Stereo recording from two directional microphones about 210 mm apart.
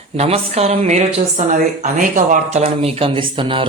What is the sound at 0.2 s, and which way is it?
Speech, 30° right (ahead or behind).